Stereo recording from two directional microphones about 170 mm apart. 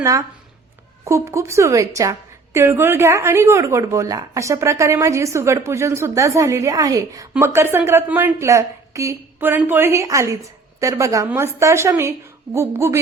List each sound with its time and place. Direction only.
0.0 s a woman's voice: 20° right (ahead or behind)